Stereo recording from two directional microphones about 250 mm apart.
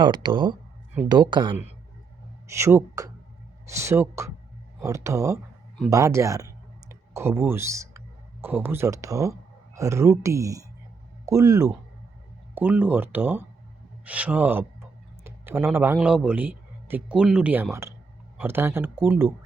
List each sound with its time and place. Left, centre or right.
0.0 s a man's voice: centre